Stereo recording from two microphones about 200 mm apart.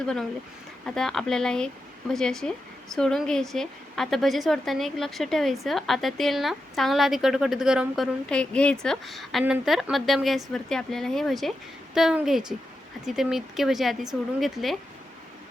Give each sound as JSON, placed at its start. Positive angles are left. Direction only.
{"t": 0.0, "sound": "a woman's voice", "side_deg": 5}